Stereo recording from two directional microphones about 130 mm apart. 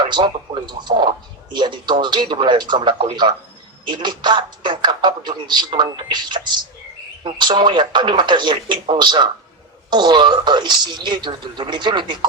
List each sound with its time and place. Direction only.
0.0 s speech: 35° right (ahead or behind)